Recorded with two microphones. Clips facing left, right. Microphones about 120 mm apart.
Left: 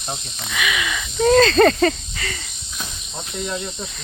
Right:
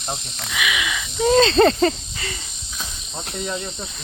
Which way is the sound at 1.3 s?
25° right (ahead or behind).